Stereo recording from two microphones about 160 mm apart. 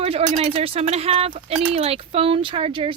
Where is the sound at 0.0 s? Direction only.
40° right (ahead or behind).